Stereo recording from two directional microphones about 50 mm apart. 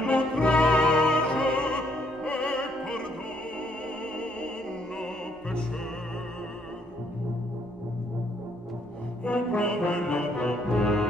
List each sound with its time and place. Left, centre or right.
0.0 s opera: left
4.9 s opera: centre
9.2 s brass instrument: left